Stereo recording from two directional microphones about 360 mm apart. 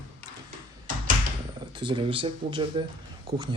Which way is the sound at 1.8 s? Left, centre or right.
Centre.